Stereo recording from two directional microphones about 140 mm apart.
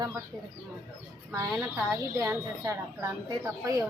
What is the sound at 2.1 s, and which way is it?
Speech, 20° right (ahead or behind).